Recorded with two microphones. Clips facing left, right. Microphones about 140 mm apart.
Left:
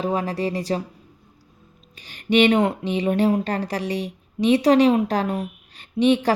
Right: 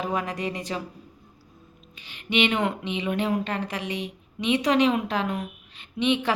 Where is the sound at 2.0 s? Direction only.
40° left (ahead or behind).